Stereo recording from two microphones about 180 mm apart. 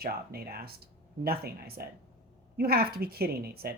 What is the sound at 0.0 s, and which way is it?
A woman's voice, 60° right (ahead or behind).